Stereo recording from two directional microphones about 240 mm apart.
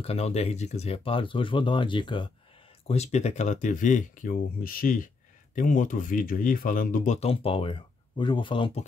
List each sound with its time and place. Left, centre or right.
0.0 s speech: left